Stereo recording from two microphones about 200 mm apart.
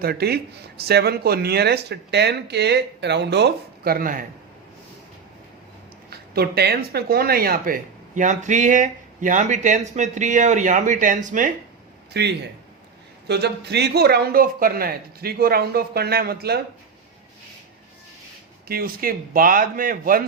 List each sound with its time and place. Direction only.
0.0 s a man's voice: 50° right (ahead or behind)
6.1 s speech: 50° right (ahead or behind)
12.1 s a man's voice: 55° right (ahead or behind)
18.7 s a man's voice: 50° right (ahead or behind)